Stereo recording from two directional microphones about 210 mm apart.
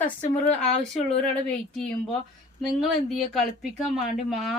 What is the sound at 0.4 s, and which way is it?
Speech, 30° left (ahead or behind).